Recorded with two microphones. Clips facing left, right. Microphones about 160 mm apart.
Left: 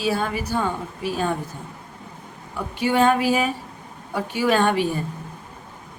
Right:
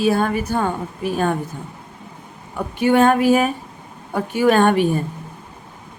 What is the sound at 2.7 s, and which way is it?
A woman's voice, 55° right (ahead or behind).